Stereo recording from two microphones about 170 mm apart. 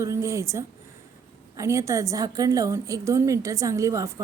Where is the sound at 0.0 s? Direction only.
15° right (ahead or behind).